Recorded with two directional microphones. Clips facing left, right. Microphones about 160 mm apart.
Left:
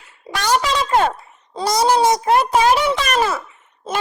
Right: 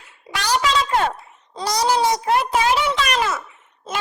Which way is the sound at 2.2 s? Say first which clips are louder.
Left 4 dB; 40° left (ahead or behind).